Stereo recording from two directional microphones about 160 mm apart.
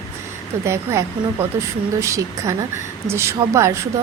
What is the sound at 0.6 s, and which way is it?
Speech, 15° right (ahead or behind).